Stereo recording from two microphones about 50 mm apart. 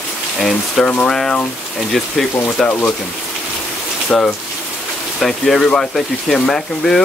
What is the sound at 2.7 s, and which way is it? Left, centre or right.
Speech, left.